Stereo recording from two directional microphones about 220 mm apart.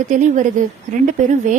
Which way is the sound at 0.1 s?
35° right (ahead or behind).